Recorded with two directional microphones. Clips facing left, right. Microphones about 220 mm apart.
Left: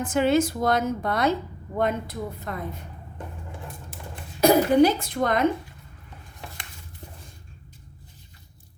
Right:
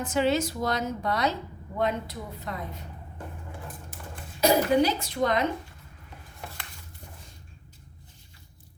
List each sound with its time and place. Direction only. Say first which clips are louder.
0.0 s a woman's voice: left 4 dB; 50° left (ahead or behind)
4.4 s a woman's voice: left 5 dB; 50° left (ahead or behind)